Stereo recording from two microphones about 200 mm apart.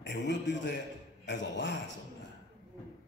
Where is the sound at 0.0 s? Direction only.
65° left (ahead or behind).